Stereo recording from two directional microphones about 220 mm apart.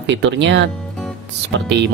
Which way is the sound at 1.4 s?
55° right (ahead or behind).